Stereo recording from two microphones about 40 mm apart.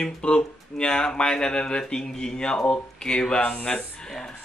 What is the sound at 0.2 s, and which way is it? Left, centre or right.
Speech, left.